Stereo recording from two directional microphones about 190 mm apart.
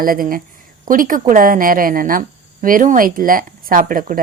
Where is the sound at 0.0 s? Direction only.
50° right (ahead or behind).